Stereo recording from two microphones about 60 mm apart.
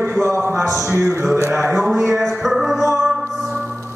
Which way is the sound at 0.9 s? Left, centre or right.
Right.